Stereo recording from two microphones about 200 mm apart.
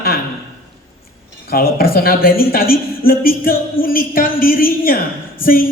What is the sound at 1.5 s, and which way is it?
A woman's voice, 50° left (ahead or behind).